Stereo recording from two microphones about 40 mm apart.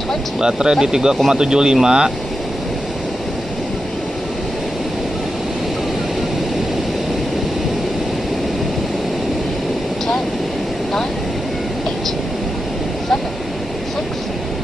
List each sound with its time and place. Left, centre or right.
0.4 s speech: right